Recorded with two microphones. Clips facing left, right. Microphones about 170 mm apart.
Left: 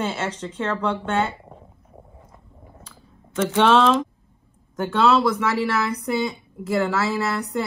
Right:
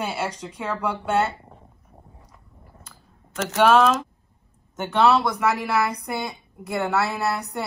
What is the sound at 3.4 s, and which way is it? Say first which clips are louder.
Speech: even; 5° right (ahead or behind).